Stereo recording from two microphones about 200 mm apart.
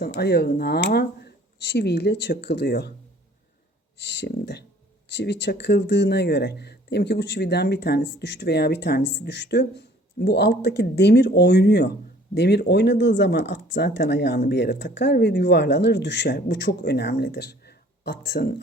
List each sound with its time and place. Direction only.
0.0 s speech: 55° left (ahead or behind)
3.9 s speech: 60° left (ahead or behind)